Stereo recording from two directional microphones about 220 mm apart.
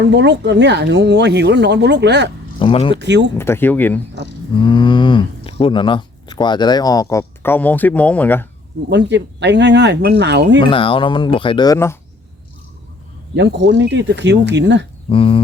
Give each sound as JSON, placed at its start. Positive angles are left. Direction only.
{"t": 0.1, "sound": "speech", "side_deg": -50}
{"t": 2.6, "sound": "speech", "side_deg": 25}
{"t": 2.9, "sound": "speech", "side_deg": -50}
{"t": 3.3, "sound": "speech", "side_deg": 10}
{"t": 4.6, "sound": "speech", "side_deg": 20}
{"t": 8.9, "sound": "speech", "side_deg": -50}
{"t": 10.6, "sound": "speech", "side_deg": 25}
{"t": 13.3, "sound": "speech", "side_deg": -55}
{"t": 15.1, "sound": "speech", "side_deg": 25}